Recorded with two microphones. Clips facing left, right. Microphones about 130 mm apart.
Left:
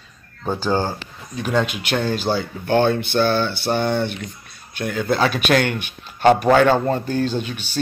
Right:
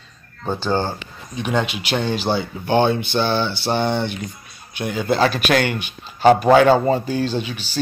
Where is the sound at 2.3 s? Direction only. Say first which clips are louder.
Right 1 dB; 20° right (ahead or behind).